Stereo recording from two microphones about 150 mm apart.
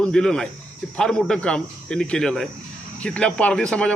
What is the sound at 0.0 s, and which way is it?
A man's voice, 5° left (ahead or behind).